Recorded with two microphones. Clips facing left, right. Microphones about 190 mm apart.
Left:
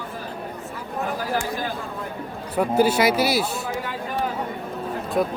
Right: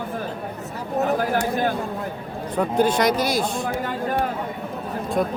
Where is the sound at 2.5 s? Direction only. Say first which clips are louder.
Left 1 dB; 5° left (ahead or behind).